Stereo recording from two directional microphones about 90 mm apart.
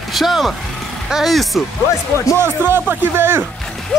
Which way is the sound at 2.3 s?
25° right (ahead or behind).